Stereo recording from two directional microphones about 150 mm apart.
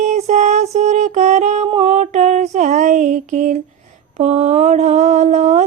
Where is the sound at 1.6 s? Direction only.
40° right (ahead or behind); by 3.6 s 55° right (ahead or behind).